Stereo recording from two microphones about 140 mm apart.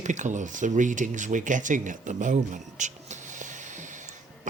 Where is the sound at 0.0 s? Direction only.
60° right (ahead or behind).